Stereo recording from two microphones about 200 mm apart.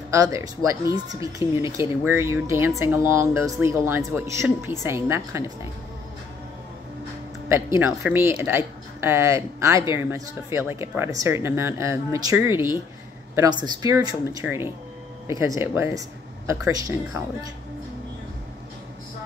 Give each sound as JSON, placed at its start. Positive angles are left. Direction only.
{"t": 0.1, "sound": "speech", "side_deg": -15}
{"t": 7.4, "sound": "speech", "side_deg": -10}